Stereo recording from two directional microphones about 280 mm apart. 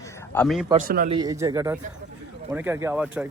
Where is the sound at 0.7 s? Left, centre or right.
Right.